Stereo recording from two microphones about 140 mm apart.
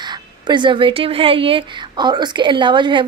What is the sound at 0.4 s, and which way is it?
A woman's voice, 35° right (ahead or behind).